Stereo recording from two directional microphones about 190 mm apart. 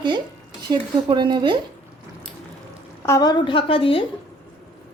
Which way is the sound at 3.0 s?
15° left (ahead or behind).